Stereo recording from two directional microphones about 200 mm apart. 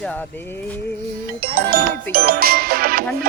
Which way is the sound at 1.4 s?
50° right (ahead or behind).